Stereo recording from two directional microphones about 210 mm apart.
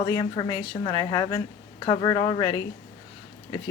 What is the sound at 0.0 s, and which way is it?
A woman's voice, 20° left (ahead or behind).